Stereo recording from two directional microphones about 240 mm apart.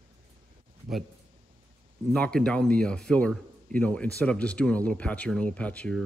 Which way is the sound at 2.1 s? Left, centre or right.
Centre.